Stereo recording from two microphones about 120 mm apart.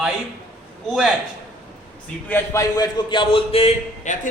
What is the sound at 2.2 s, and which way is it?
Speech, 15° left (ahead or behind).